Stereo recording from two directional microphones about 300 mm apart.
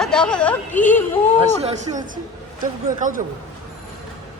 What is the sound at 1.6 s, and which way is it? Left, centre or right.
A man's voice, right.